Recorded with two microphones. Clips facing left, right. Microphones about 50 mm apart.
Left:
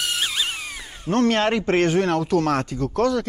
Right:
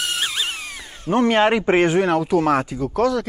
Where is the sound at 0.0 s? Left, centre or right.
Centre.